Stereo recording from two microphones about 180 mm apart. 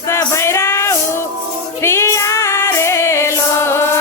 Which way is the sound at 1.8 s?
15° left (ahead or behind).